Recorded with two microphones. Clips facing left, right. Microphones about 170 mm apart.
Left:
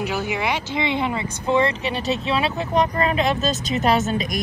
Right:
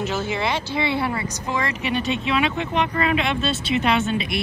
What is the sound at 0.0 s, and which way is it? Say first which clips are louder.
Speech: even; 15° left (ahead or behind).